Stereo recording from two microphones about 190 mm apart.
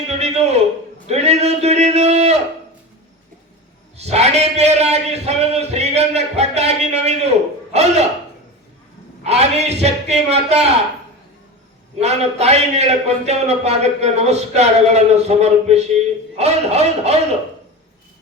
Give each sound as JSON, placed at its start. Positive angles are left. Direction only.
{"t": 0.1, "sound": "a sound", "side_deg": -35}
{"t": 3.9, "sound": "a man's voice", "side_deg": -35}
{"t": 9.2, "sound": "a man's voice", "side_deg": -35}
{"t": 11.9, "sound": "a man's voice", "side_deg": -35}